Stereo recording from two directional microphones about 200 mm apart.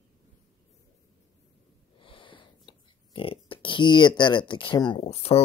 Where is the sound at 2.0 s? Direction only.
25° left (ahead or behind).